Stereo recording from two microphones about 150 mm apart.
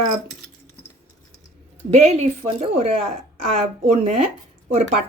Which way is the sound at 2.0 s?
45° right (ahead or behind).